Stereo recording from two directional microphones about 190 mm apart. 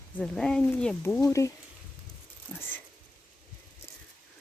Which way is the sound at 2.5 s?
5° left (ahead or behind).